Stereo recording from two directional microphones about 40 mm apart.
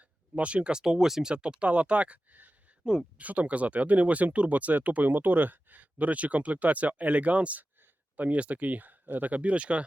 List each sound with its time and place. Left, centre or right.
0.3 s speech: right
0.9 s speech: centre
1.3 s speech: right
1.6 s speech: right
2.8 s speech: centre
3.2 s speech: right